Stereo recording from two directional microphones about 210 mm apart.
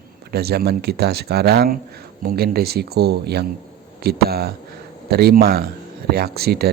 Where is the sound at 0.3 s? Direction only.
50° right (ahead or behind).